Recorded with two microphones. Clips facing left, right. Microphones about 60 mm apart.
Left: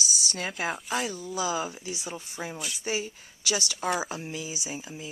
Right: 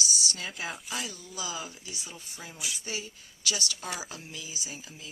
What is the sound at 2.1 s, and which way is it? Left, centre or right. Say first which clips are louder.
Speech: left 8 dB; left.